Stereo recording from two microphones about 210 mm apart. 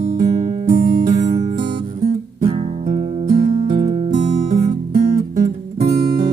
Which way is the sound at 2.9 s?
35° right (ahead or behind).